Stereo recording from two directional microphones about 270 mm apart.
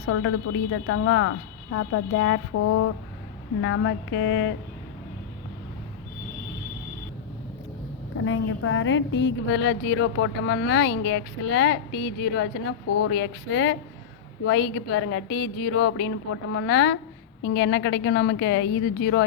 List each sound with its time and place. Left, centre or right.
0.1 s a woman's voice: left
3.6 s a woman's voice: left
8.2 s a woman's voice: left